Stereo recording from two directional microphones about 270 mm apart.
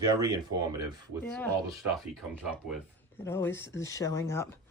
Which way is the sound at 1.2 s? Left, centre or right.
Centre.